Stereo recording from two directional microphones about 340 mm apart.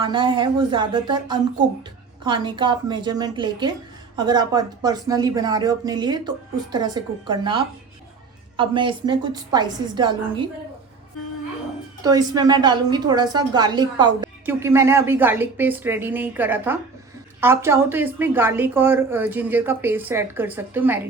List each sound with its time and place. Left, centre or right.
0.0 s a woman's voice: centre
12.0 s a woman's voice: centre